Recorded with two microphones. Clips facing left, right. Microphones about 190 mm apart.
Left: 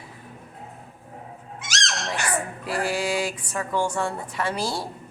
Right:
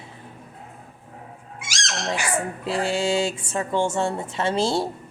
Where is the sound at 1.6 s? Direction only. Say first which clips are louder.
Left 3 dB; 10° right (ahead or behind).